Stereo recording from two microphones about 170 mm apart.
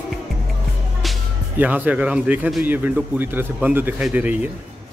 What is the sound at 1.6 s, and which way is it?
Speech, 10° right (ahead or behind).